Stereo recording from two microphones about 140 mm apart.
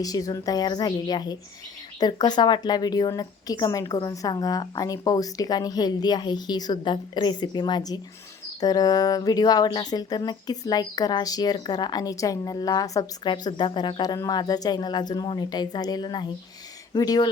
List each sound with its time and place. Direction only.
0.0 s speech: 25° left (ahead or behind)